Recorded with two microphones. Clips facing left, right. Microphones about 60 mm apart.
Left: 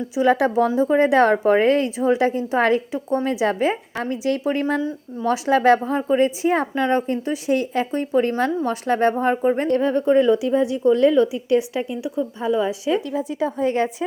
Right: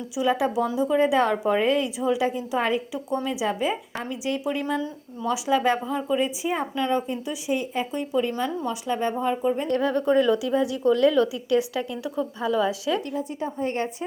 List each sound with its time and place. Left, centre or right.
0.2 s a woman's voice: left
2.6 s speech: left
2.9 s a woman's voice: left
3.2 s a woman's voice: left
5.8 s a woman's voice: left
6.2 s speech: left
6.7 s speech: left
9.2 s a woman's voice: left
9.7 s speech: left
13.4 s a woman's voice: left